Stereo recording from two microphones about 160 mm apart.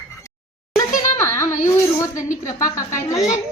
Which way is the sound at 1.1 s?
15° left (ahead or behind).